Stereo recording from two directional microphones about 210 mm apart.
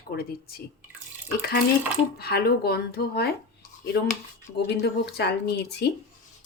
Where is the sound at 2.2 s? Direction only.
50° left (ahead or behind).